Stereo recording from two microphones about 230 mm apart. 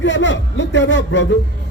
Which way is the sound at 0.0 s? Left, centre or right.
Left.